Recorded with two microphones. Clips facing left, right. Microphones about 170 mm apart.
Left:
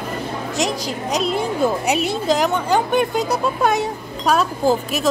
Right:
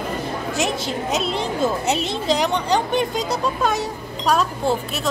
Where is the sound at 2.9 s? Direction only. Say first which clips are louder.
Left 3 dB; 55° left (ahead or behind).